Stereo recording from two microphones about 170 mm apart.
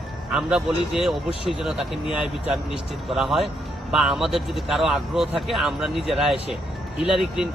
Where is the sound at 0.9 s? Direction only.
Centre (ahead or behind).